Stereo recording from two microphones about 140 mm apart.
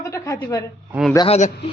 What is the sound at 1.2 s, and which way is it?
Speech, 50° left (ahead or behind).